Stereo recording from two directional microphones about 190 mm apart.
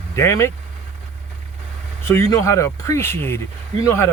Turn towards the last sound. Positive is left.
turn(degrees=15)  # may be behind; listen again after turning